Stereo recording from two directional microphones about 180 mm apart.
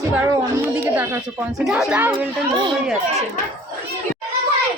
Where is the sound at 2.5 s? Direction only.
25° right (ahead or behind).